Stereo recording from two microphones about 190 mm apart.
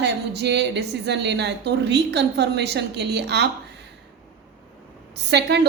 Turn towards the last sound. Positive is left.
turn(degrees=-65)  # may be behind; listen again after turning